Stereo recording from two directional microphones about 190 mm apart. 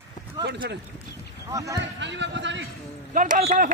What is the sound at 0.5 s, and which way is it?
Speech, 60° right (ahead or behind).